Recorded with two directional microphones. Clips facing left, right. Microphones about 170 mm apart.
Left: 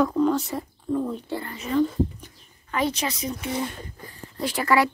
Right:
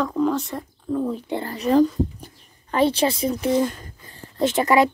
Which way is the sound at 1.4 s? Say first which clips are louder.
Right 6 dB; 35° right (ahead or behind).